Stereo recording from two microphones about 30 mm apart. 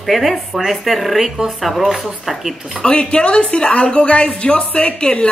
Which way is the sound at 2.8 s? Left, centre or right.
Left.